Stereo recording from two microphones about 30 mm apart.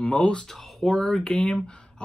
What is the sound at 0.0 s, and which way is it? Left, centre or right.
Speech, left.